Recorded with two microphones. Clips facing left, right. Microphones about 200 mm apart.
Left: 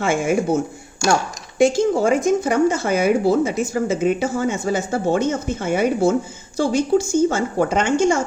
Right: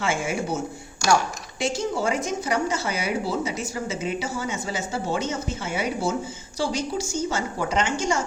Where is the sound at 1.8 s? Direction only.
50° left (ahead or behind).